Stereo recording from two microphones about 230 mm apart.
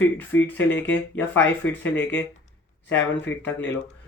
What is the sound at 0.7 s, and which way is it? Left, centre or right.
Speech, left.